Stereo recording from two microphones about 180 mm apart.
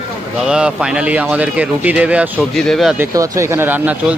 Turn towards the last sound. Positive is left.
turn(degrees=-10)  # may be behind; listen again after turning